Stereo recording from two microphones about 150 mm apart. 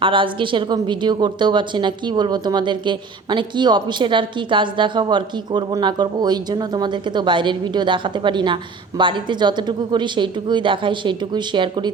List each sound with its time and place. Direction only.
0.0 s a woman's voice: 35° right (ahead or behind)